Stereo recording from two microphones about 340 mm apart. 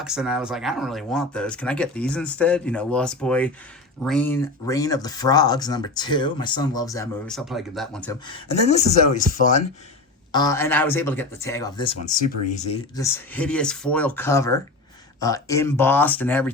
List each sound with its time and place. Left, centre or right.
0.0 s speech: centre
8.5 s speech: centre
10.3 s speech: centre
13.0 s speech: centre